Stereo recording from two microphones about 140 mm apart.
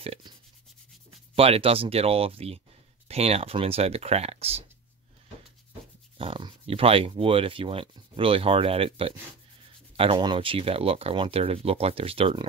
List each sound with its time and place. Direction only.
0.0 s speech: 40° right (ahead or behind)
1.3 s speech: 45° right (ahead or behind)
6.1 s speech: 40° right (ahead or behind)